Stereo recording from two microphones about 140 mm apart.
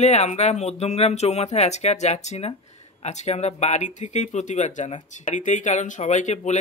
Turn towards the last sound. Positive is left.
turn(degrees=55)  # may be behind; listen again after turning